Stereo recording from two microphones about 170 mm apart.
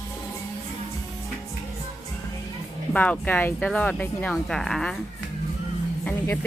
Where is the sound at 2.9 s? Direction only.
10° left (ahead or behind).